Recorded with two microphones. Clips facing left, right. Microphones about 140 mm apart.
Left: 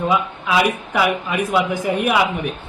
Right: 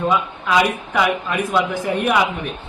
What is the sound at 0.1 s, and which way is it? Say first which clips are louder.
Speech: even; 5° left (ahead or behind).